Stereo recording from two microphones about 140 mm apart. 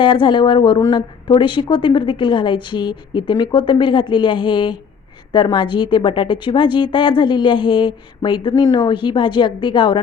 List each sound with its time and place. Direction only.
0.0 s a woman's voice: 35° left (ahead or behind)